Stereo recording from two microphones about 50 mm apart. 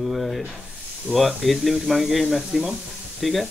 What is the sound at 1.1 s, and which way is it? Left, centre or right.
Speech, centre.